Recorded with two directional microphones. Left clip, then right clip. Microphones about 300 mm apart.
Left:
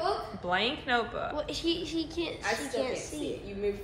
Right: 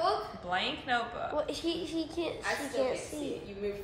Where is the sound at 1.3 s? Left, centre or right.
Right.